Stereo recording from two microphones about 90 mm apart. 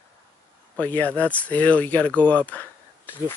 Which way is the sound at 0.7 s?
20° left (ahead or behind).